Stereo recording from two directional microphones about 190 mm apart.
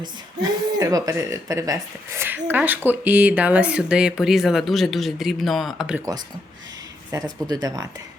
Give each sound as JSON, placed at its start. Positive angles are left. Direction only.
{"t": 0.0, "sound": "speech", "side_deg": -20}
{"t": 7.1, "sound": "speech", "side_deg": -20}